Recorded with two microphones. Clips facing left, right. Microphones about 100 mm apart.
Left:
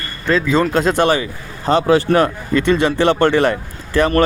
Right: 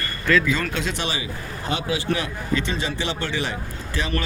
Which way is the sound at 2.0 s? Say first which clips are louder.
Left 9 dB; 55° left (ahead or behind).